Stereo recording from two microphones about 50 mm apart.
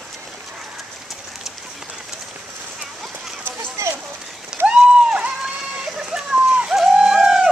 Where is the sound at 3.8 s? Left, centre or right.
Right.